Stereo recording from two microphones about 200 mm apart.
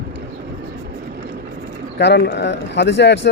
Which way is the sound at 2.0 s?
60° left (ahead or behind).